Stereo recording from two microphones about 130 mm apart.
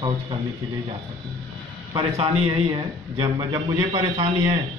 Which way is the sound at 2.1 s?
50° right (ahead or behind).